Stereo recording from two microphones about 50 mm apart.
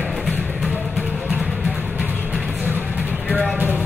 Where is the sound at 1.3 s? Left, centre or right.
Right.